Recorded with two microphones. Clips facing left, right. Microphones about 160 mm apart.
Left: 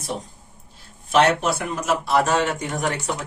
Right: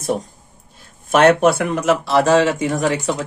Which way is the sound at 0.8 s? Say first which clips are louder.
Right 4 dB; 50° right (ahead or behind).